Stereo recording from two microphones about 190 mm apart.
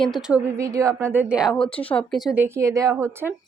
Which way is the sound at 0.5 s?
15° right (ahead or behind).